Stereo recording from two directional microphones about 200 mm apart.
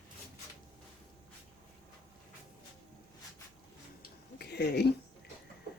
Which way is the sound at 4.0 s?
55° left (ahead or behind).